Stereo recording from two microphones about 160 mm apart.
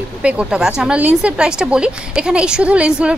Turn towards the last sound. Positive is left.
turn(degrees=-5)  # may be behind; listen again after turning